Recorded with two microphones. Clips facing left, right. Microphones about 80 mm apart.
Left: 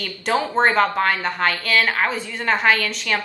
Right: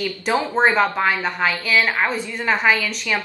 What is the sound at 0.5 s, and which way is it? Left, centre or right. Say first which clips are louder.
A woman's voice: even; centre.